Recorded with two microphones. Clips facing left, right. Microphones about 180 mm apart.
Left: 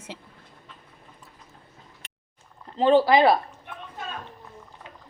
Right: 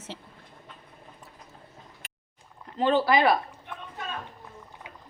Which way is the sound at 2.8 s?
30° left (ahead or behind).